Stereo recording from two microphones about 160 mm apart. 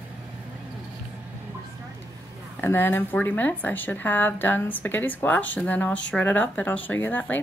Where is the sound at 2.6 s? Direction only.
15° left (ahead or behind).